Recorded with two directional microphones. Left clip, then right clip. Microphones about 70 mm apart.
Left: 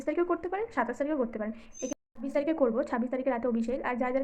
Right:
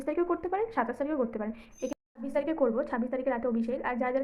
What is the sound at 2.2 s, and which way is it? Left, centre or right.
A woman's voice, left.